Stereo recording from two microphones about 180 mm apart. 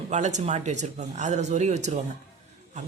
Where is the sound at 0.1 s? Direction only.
40° right (ahead or behind).